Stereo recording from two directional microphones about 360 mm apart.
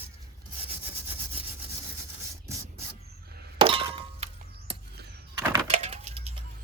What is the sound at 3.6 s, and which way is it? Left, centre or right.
Glass, centre.